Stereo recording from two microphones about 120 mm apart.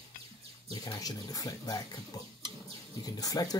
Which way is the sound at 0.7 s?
30° left (ahead or behind).